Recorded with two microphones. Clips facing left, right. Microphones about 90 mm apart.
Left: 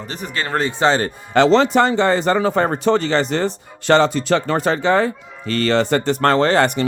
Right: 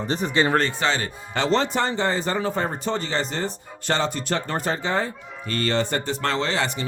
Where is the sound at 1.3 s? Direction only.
85° left.